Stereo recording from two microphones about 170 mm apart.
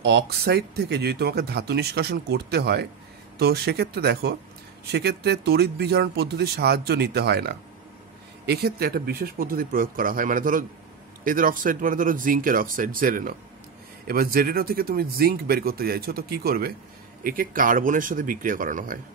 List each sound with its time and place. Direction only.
0.0 s speech: 75° right (ahead or behind); by 18.9 s 50° right (ahead or behind)